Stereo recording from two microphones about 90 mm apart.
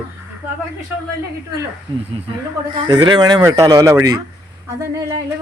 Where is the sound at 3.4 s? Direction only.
35° right (ahead or behind).